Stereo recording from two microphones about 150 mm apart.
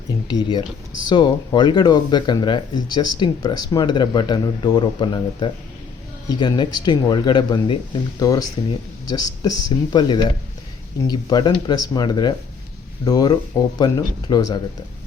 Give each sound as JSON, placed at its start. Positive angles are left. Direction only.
{"t": 0.3, "sound": "speech", "side_deg": 30}